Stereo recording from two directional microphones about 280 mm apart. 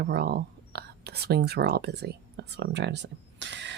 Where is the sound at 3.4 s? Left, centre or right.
Right.